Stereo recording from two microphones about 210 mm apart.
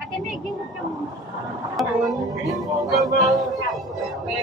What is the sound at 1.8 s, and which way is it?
A man's voice, centre (ahead or behind).